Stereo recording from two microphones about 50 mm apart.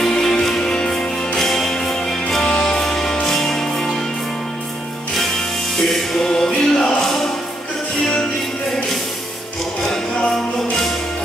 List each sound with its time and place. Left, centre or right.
0.0 s music: centre
5.8 s music: centre